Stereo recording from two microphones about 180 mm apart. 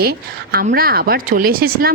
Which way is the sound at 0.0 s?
60° right (ahead or behind).